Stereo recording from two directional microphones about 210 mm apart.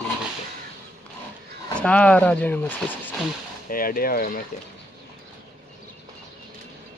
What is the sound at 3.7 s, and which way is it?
Speech, 45° left (ahead or behind).